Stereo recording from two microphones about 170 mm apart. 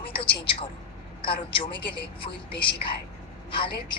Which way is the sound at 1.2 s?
30° left (ahead or behind).